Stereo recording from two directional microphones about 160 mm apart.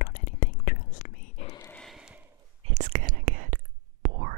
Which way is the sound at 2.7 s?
55° right (ahead or behind).